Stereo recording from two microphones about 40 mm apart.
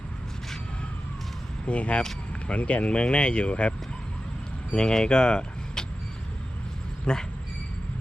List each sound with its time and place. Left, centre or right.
1.6 s speech: left
4.7 s speech: centre
7.0 s speech: centre